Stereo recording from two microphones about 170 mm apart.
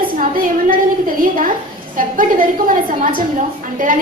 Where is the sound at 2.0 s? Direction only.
55° right (ahead or behind).